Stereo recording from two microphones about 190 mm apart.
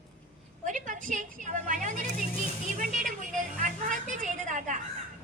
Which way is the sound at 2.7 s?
45° right (ahead or behind).